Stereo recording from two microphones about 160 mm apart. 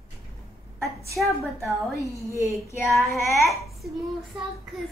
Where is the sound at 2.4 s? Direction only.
20° left (ahead or behind).